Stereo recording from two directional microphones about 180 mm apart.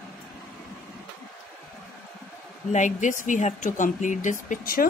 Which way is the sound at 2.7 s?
45° left (ahead or behind).